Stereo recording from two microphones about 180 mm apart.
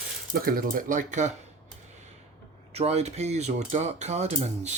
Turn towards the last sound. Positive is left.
turn(degrees=-40)  # may be behind; listen again after turning